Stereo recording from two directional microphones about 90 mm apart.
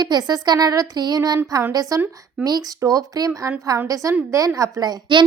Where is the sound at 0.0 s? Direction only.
50° right (ahead or behind).